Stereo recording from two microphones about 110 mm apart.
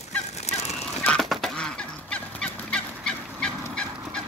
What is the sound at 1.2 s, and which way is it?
Fowl, centre (ahead or behind).